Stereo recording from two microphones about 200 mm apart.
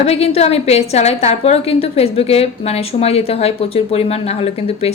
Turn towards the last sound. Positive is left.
turn(degrees=30)  # may be behind; listen again after turning